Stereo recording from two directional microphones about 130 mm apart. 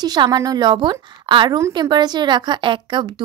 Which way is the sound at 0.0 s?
30° right (ahead or behind).